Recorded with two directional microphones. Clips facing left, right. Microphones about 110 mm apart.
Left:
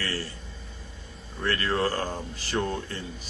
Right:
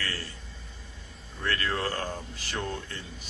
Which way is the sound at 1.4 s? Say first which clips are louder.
Left 4 dB; 35° left (ahead or behind).